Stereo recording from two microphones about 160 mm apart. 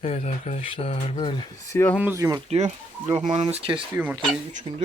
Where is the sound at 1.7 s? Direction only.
10° left (ahead or behind).